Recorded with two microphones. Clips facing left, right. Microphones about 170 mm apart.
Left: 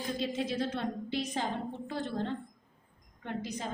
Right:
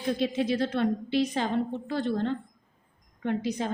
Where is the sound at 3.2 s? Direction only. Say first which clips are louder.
Right 8 dB; 75° right (ahead or behind).